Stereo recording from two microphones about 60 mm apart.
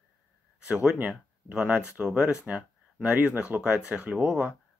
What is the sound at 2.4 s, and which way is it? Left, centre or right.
Speech, right.